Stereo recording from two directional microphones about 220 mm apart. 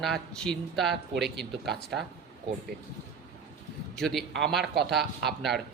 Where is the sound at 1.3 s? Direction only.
50° right (ahead or behind).